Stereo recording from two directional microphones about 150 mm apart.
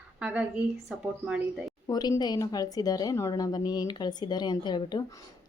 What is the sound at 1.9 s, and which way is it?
A woman's voice, 25° left (ahead or behind).